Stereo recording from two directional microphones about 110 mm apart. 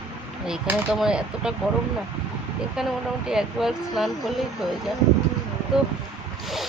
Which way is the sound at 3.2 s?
5° right (ahead or behind).